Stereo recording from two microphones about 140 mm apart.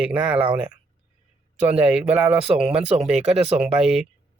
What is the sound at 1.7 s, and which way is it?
Speech, 10° right (ahead or behind).